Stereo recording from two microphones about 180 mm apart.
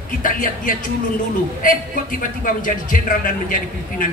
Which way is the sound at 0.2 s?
50° left (ahead or behind).